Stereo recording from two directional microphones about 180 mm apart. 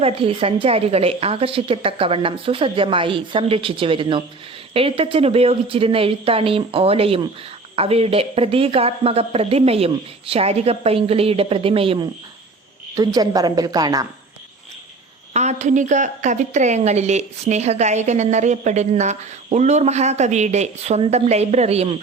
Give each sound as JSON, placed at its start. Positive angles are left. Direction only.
{"t": 0.0, "sound": "a woman's voice", "side_deg": -30}
{"t": 12.9, "sound": "a woman's voice", "side_deg": -20}
{"t": 15.3, "sound": "a woman's voice", "side_deg": -40}